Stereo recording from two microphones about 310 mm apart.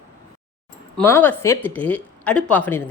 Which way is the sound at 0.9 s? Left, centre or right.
Centre.